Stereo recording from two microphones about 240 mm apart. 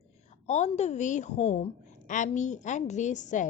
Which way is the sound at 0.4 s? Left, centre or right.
Left.